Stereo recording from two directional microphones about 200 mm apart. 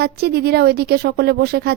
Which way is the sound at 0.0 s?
50° right (ahead or behind).